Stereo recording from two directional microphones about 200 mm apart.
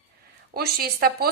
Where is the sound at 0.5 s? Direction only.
50° right (ahead or behind).